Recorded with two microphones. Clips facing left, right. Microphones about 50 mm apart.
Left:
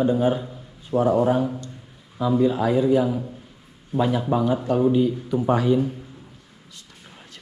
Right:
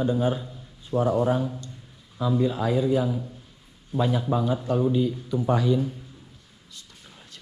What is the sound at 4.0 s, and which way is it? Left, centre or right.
Speech, left.